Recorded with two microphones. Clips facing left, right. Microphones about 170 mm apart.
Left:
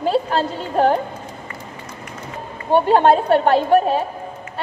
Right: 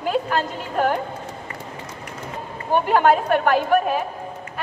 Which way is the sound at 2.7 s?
30° left (ahead or behind).